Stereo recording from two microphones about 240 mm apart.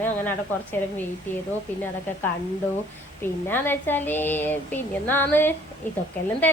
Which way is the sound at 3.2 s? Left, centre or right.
Centre.